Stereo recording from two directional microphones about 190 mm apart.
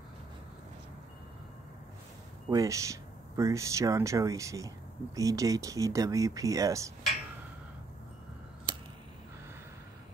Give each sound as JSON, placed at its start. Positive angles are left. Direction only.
{"t": 2.5, "sound": "speech", "side_deg": -15}